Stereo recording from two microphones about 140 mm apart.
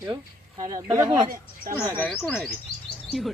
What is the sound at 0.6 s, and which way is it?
Speech, 25° right (ahead or behind).